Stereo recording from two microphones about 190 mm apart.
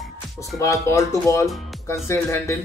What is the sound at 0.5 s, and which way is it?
Speech, 15° left (ahead or behind).